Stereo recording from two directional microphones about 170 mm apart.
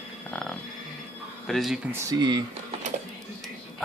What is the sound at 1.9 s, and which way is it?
Speech, 20° right (ahead or behind).